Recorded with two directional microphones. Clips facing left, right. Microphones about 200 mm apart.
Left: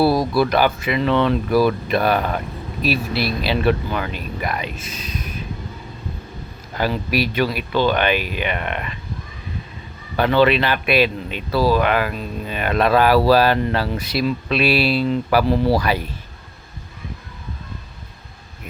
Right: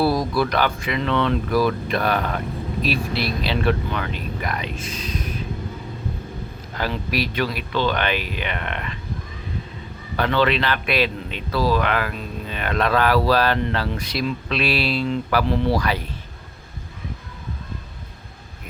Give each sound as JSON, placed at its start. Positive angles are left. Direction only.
{"t": 0.0, "sound": "speech", "side_deg": 30}
{"t": 0.5, "sound": "speech", "side_deg": 10}
{"t": 6.7, "sound": "speech", "side_deg": 10}
{"t": 10.2, "sound": "speech", "side_deg": 10}
{"t": 15.4, "sound": "speech", "side_deg": 35}
{"t": 15.8, "sound": "speech", "side_deg": 10}